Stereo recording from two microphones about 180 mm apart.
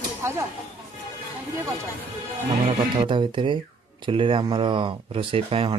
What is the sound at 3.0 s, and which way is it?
Speech, 25° right (ahead or behind).